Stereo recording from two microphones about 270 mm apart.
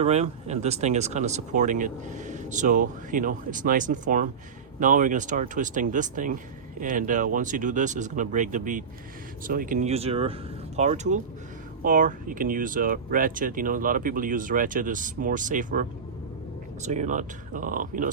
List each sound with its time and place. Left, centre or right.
0.0 s speech: right